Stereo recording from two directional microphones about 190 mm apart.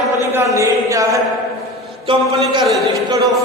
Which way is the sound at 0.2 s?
15° right (ahead or behind).